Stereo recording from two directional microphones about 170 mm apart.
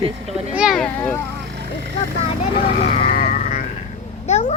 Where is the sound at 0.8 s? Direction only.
10° left (ahead or behind).